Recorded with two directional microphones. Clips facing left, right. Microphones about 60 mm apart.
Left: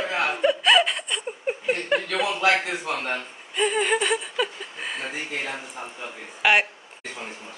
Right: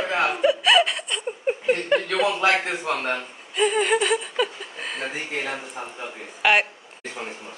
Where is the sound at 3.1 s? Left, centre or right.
Centre.